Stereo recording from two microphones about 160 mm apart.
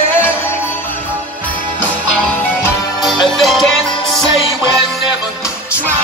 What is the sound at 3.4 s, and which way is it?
Music, centre (ahead or behind).